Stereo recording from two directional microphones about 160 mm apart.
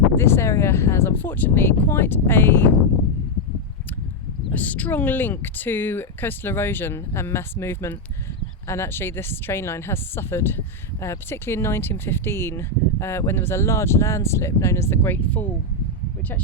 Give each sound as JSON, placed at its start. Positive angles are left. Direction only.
{"t": 0.2, "sound": "speech", "side_deg": 15}
{"t": 4.5, "sound": "speech", "side_deg": 10}